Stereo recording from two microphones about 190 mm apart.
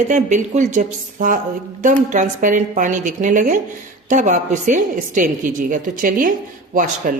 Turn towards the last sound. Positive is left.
turn(degrees=-45)  # may be behind; listen again after turning